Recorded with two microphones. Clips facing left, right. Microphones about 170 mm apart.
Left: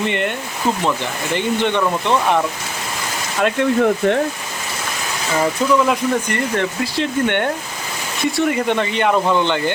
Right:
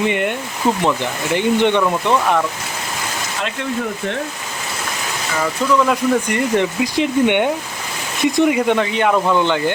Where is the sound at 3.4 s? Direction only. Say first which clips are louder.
Left 9 dB; 55° left (ahead or behind).